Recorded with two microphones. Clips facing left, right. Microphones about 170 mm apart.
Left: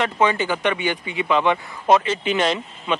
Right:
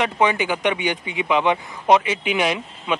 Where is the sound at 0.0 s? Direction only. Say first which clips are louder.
Even; 15° right (ahead or behind).